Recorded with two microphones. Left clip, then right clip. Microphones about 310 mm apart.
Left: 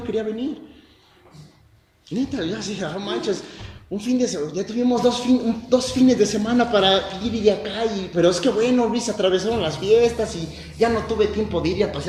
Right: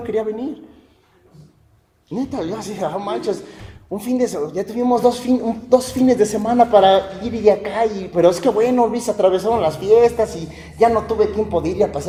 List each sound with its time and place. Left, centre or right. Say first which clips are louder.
0.1 s a man's voice: right 4 dB; right
2.1 s a man's voice: right 2 dB; right